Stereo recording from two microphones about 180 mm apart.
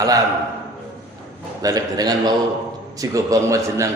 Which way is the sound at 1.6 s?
20° right (ahead or behind).